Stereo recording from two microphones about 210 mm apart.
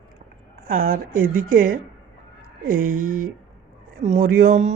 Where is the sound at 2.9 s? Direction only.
90° right.